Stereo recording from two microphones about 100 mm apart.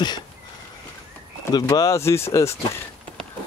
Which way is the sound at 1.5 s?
40° left (ahead or behind).